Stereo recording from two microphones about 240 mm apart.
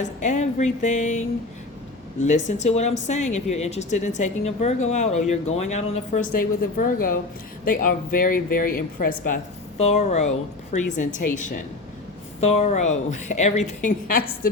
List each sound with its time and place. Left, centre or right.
0.0 s speech: left
2.2 s speech: left